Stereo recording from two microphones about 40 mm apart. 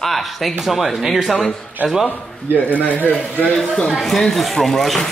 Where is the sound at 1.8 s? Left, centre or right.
Right.